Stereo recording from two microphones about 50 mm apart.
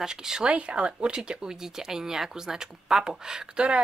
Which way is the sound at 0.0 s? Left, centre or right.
Centre.